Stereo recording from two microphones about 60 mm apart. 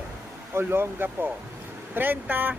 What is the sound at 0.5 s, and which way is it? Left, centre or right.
Speech, right.